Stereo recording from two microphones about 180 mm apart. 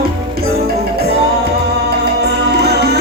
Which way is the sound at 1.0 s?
65° right (ahead or behind).